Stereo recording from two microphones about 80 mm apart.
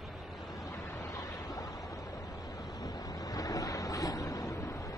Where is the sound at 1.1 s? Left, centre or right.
Left.